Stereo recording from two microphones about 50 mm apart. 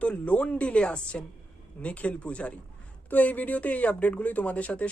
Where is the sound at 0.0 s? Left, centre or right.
Left.